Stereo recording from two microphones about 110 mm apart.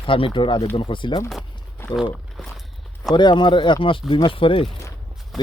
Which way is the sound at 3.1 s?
45° left (ahead or behind).